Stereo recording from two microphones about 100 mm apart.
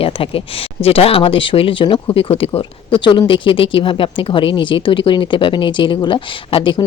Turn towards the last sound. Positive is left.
turn(degrees=55)  # may be behind; listen again after turning